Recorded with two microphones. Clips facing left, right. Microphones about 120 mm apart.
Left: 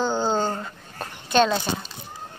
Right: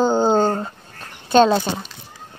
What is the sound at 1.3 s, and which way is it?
Speech, 30° right (ahead or behind).